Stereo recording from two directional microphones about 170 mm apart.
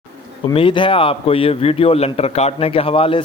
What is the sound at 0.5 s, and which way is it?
A man's voice, 30° left (ahead or behind).